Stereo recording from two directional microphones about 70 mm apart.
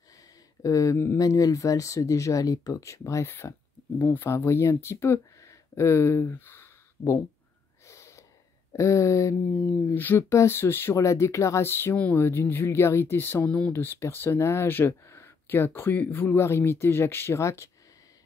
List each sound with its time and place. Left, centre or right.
0.6 s speech: left
4.0 s speech: left
7.8 s snort: left
8.7 s speech: left
11.0 s speech: left